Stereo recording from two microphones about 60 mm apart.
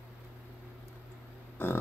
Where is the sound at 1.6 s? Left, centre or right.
Left.